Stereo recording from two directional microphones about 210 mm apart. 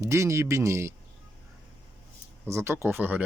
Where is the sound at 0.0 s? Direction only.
15° right (ahead or behind).